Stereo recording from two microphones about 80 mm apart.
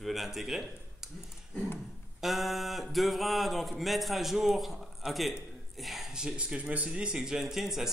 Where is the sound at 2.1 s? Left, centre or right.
Centre.